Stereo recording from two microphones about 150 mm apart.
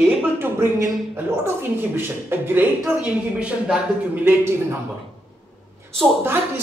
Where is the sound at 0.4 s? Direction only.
20° right (ahead or behind).